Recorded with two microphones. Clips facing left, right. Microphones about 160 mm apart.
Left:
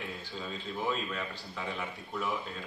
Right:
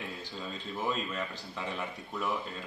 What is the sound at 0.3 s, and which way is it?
A man's voice, centre (ahead or behind).